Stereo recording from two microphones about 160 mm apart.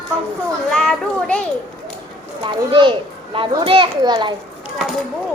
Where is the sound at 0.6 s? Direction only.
5° left (ahead or behind).